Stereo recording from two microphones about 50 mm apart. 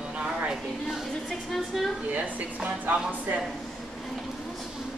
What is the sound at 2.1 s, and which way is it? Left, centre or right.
Speech, right.